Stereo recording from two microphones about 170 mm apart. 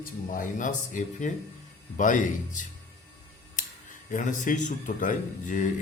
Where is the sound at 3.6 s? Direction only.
50° left (ahead or behind).